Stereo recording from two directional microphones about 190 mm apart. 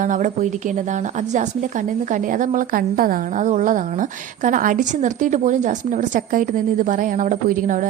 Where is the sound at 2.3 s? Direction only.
45° right (ahead or behind).